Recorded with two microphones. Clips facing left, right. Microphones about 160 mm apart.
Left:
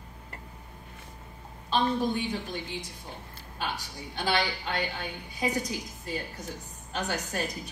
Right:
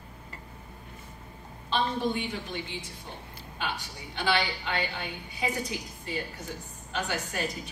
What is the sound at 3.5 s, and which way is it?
A woman's voice, 40° left (ahead or behind).